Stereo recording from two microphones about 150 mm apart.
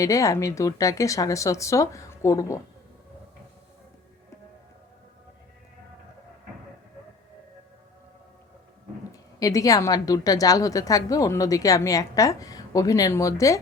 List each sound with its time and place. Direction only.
0.0 s a woman's voice: 20° left (ahead or behind)
9.4 s a woman's voice: 25° left (ahead or behind)